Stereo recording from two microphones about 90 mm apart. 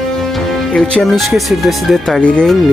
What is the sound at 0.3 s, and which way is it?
Speech, centre (ahead or behind).